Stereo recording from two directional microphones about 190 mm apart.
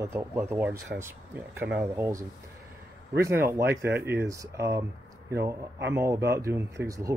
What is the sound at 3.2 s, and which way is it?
Speech, 15° right (ahead or behind).